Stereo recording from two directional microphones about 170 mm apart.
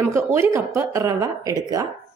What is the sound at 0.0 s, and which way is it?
A woman's voice, 15° right (ahead or behind).